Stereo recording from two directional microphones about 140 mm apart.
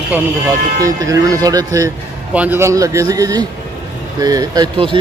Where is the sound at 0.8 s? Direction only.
25° right (ahead or behind).